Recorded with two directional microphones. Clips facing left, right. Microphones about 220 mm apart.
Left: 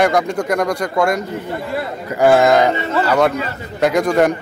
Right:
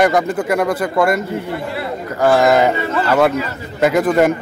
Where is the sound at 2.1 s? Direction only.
10° left (ahead or behind).